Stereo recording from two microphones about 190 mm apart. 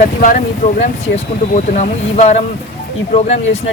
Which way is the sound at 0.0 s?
45° left (ahead or behind).